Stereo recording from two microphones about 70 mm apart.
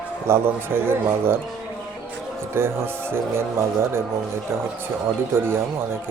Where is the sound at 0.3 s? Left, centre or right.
Right.